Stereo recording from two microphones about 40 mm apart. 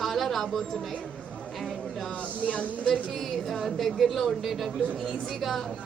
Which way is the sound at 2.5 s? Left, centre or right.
Left.